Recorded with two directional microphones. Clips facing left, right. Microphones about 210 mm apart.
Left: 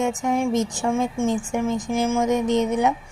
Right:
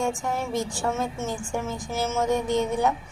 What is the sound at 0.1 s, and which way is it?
A woman's voice, 15° left (ahead or behind).